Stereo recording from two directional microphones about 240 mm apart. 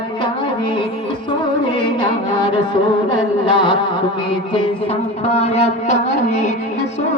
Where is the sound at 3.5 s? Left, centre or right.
Centre.